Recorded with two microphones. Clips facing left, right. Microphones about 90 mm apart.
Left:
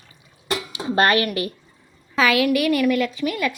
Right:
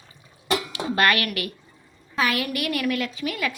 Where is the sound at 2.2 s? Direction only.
90° left.